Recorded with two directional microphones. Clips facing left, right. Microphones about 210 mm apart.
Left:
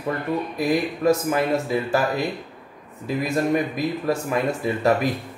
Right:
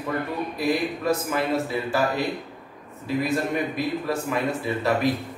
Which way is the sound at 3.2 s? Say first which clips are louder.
Left 6 dB; 45° left (ahead or behind).